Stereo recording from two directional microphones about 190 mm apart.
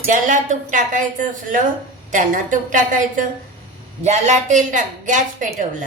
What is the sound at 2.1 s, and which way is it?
A woman's voice, 45° right (ahead or behind).